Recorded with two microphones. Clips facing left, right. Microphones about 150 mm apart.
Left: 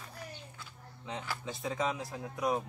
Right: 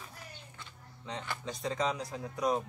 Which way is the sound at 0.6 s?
5° left (ahead or behind).